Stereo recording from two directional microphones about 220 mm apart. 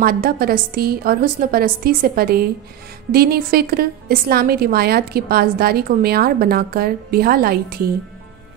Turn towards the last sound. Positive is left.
turn(degrees=-45)  # may be behind; listen again after turning